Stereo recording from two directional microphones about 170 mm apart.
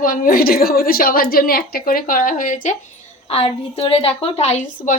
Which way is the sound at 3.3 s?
35° left (ahead or behind).